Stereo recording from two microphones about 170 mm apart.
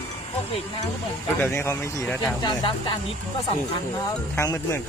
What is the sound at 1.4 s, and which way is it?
Speech, 15° left (ahead or behind).